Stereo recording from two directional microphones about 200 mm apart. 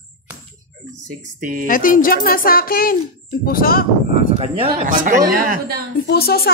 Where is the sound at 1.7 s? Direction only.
45° left (ahead or behind).